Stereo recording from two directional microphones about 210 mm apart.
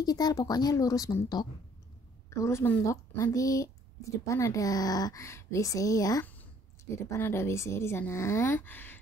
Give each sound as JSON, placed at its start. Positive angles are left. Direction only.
{"t": 0.0, "sound": "a woman's voice", "side_deg": 20}